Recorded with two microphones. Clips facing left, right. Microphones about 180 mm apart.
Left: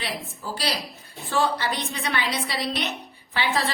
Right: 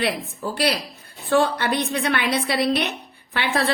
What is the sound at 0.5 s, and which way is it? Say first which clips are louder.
A woman's voice: right 6 dB; 60° right (ahead or behind).